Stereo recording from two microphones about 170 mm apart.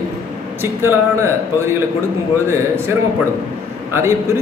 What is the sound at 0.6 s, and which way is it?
A man's voice, 15° right (ahead or behind).